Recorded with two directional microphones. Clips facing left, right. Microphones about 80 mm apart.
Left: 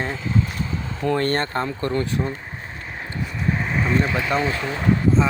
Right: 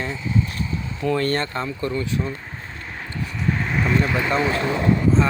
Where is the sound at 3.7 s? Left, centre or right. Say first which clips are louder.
Even; centre.